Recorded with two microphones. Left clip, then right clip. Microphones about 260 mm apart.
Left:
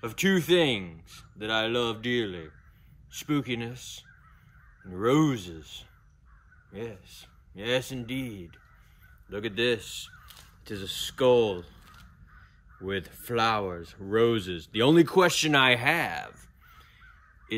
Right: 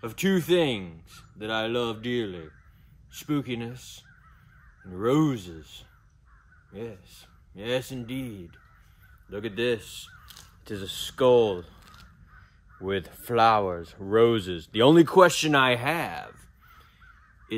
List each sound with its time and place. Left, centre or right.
0.0 s speech: centre
12.8 s speech: centre
17.5 s speech: centre